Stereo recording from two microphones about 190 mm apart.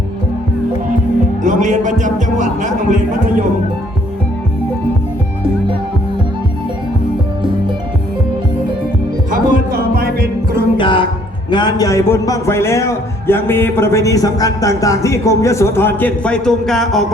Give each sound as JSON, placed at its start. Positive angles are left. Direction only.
{"t": 1.5, "sound": "a man's voice", "side_deg": -40}
{"t": 9.3, "sound": "music", "side_deg": -50}
{"t": 10.8, "sound": "a sound", "side_deg": 25}
{"t": 11.5, "sound": "a man's voice", "side_deg": 20}